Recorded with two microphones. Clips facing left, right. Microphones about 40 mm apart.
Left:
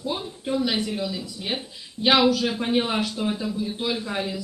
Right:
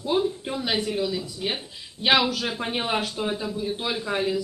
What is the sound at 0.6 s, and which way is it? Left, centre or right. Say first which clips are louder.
Speech: even; right.